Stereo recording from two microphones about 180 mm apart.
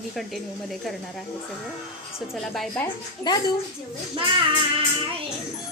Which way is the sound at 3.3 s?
25° left (ahead or behind).